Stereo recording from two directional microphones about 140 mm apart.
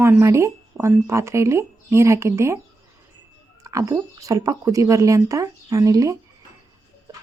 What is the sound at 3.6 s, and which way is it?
Speech, 25° right (ahead or behind).